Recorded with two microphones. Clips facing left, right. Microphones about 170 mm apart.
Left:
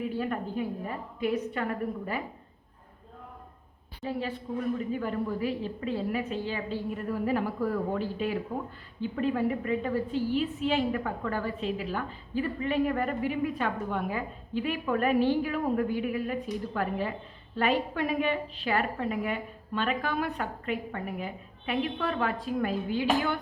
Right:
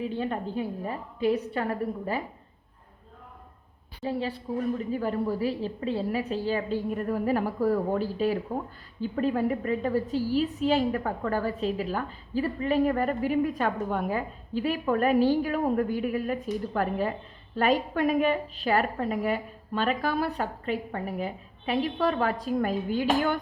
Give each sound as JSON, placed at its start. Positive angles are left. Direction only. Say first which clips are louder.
{"t": 0.1, "sound": "a woman's voice", "louder": "right 1 dB", "side_deg": -25}
{"t": 4.0, "sound": "a woman's voice", "louder": "right 3 dB", "side_deg": -35}